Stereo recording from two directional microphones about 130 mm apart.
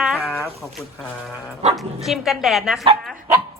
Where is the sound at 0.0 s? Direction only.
5° right (ahead or behind).